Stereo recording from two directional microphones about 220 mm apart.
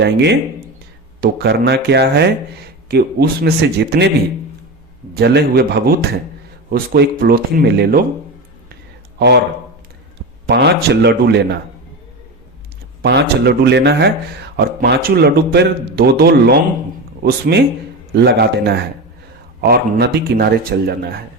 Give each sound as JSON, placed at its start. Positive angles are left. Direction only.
{"t": 0.0, "sound": "a man's voice", "side_deg": -50}
{"t": 5.1, "sound": "a man's voice", "side_deg": -45}
{"t": 8.7, "sound": "a sound", "side_deg": -50}
{"t": 10.5, "sound": "a man's voice", "side_deg": -50}
{"t": 13.0, "sound": "a man's voice", "side_deg": -50}
{"t": 18.2, "sound": "a man's voice", "side_deg": -50}